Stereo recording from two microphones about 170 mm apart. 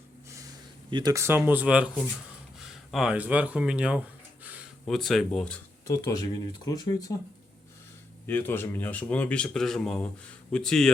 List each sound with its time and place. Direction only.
0.9 s speech: 25° right (ahead or behind); by 1.9 s 5° right (ahead or behind)
2.6 s a sound: 5° right (ahead or behind)
4.9 s speech: centre (ahead or behind)
5.9 s speech: 20° left (ahead or behind)
8.3 s speech: 10° left (ahead or behind)